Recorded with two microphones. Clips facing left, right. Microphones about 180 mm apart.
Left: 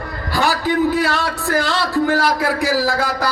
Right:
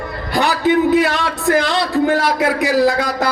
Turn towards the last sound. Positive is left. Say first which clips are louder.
# right 4 dB
turn(degrees=-20)  # may be behind; listen again after turning